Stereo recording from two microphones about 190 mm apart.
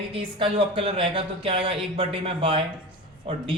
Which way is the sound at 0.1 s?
30° right (ahead or behind).